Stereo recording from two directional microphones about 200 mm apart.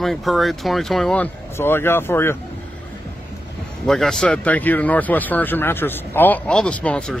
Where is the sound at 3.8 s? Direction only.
Centre (ahead or behind).